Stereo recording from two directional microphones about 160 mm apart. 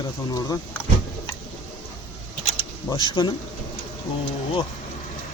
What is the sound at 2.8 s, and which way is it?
Speech, 25° left (ahead or behind).